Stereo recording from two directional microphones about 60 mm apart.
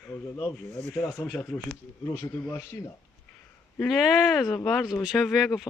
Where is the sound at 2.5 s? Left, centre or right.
Left.